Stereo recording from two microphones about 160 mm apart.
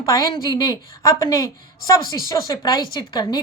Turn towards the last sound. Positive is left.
turn(degrees=25)  # may be behind; listen again after turning